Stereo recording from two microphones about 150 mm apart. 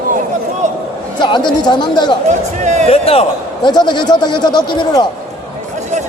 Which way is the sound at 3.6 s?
30° left (ahead or behind).